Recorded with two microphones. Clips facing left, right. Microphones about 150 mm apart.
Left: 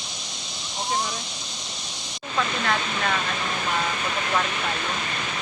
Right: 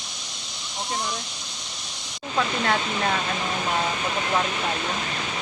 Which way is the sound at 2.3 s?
25° right (ahead or behind).